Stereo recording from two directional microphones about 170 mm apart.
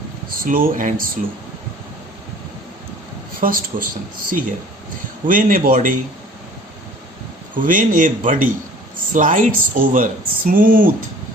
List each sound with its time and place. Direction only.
0.3 s speech: 55° right (ahead or behind)
3.4 s speech: 55° right (ahead or behind)
7.5 s speech: 50° right (ahead or behind)